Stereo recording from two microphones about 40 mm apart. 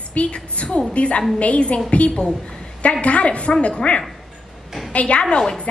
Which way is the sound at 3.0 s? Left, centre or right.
Left.